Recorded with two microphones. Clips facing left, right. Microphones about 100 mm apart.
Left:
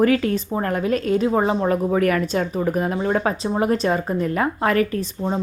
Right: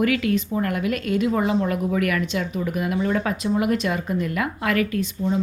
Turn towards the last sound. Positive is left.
turn(degrees=35)  # may be behind; listen again after turning